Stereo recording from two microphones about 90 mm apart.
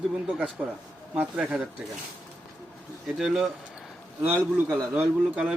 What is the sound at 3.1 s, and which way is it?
Speech, 5° right (ahead or behind).